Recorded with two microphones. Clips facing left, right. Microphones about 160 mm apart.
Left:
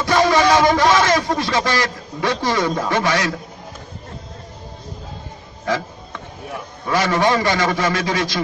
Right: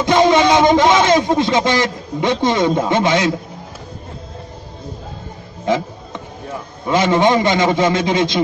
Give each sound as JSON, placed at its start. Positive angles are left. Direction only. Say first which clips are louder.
{"t": 0.0, "sound": "speech", "louder": "right 3 dB", "side_deg": -20}
{"t": 5.7, "sound": "a man's voice", "louder": "right 4 dB", "side_deg": -20}
{"t": 6.9, "sound": "a man's voice", "louder": "right 4 dB", "side_deg": -20}